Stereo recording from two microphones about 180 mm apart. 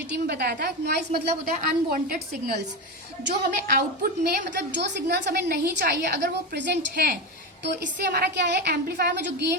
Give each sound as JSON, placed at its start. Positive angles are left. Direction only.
{"t": 0.1, "sound": "a woman's voice", "side_deg": -65}
{"t": 3.5, "sound": "a woman's voice", "side_deg": -50}